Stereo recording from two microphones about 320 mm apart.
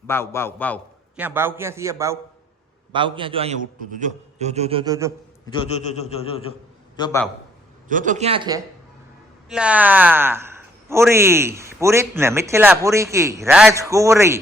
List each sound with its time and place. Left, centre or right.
0.1 s a man's voice: centre
1.2 s a man's voice: centre
5.5 s a man's voice: centre
7.9 s a man's voice: right; by 14.3 s centre